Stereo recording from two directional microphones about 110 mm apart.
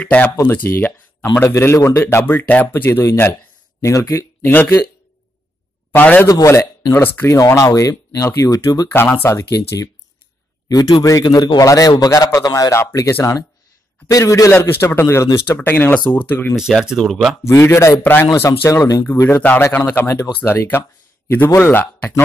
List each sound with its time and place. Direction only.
0.0 s speech: 15° left (ahead or behind); by 4.5 s 30° left (ahead or behind)
5.9 s a man's voice: 15° left (ahead or behind)
6.2 s speech: 30° left (ahead or behind)
7.3 s speech: 30° left (ahead or behind)
8.8 s speech: 20° left (ahead or behind)
10.7 s a man's voice: 35° left (ahead or behind); by 16.5 s 20° left (ahead or behind)
16.5 s speech: 5° right (ahead or behind)
17.4 s speech: 25° left (ahead or behind)
19.0 s speech: 20° left (ahead or behind)